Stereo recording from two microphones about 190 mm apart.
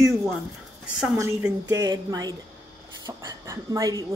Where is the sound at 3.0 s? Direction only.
15° right (ahead or behind).